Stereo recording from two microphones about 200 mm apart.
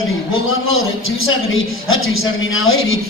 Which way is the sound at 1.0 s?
90° left.